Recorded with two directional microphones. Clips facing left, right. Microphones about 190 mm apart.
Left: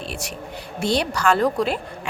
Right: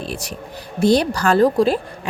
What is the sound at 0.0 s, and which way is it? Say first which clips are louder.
Speech: right 3 dB; 35° right (ahead or behind).